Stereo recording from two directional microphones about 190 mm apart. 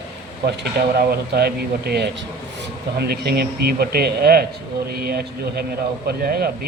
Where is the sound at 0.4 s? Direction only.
60° right (ahead or behind).